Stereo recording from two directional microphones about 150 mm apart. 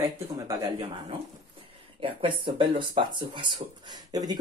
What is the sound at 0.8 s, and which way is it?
Speech, 35° right (ahead or behind).